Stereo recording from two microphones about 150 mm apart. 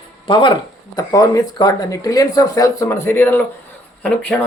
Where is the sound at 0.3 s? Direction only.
30° left (ahead or behind).